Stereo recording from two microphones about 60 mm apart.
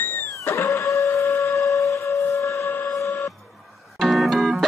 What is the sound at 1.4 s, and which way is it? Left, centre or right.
Train, left.